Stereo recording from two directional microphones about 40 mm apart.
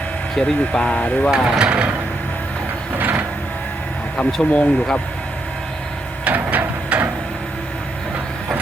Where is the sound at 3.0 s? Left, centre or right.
Right.